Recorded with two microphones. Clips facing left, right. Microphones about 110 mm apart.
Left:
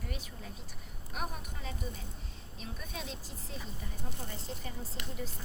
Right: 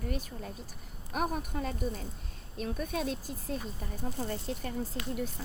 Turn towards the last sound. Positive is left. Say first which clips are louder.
# right 7 dB
turn(degrees=-55)  # may be behind; listen again after turning